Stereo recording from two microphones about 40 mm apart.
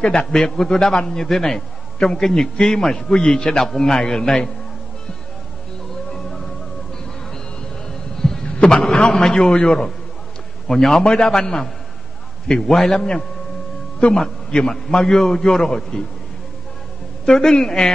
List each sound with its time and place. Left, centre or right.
0.0 s a man's voice: left
7.9 s a sound: centre
9.3 s a man's voice: left
14.0 s a man's voice: left
14.5 s a man's voice: centre
17.3 s a man's voice: centre